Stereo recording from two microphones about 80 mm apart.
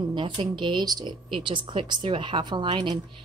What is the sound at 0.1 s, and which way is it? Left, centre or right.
Speech, right.